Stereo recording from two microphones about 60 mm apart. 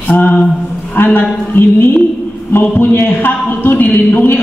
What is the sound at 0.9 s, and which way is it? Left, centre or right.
A man's voice, left.